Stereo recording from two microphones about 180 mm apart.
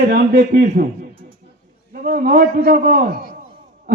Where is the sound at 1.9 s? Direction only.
50° right (ahead or behind).